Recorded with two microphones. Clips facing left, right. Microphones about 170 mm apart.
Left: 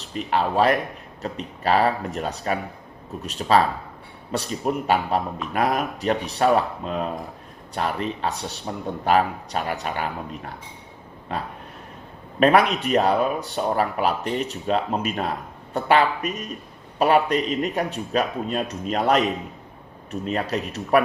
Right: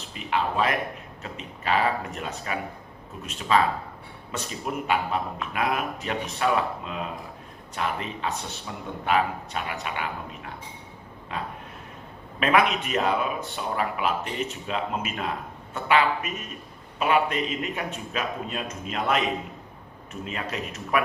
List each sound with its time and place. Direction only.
0.0 s speech: 40° left (ahead or behind)